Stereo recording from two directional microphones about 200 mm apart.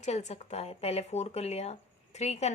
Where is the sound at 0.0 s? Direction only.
35° left (ahead or behind).